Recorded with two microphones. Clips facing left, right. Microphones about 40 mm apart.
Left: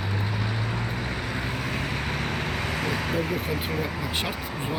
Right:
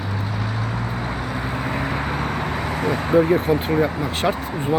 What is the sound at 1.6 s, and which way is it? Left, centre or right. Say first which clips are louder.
Vehicle: right 5 dB; right.